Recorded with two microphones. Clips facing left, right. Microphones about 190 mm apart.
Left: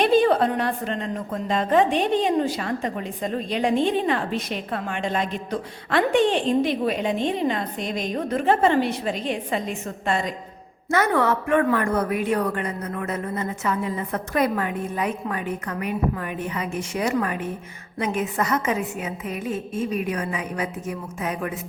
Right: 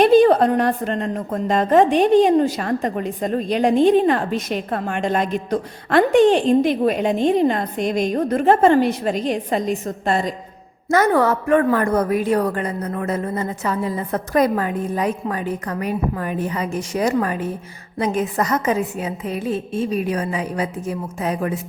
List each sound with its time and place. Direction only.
0.0 s a woman's voice: 45° right (ahead or behind)